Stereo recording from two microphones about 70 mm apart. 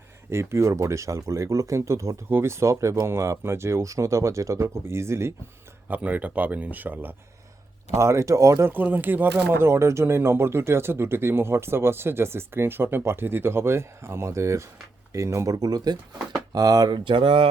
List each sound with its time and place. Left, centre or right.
0.3 s speech: right
5.9 s speech: right
7.9 s speech: right
8.6 s speech: right
15.5 s speech: right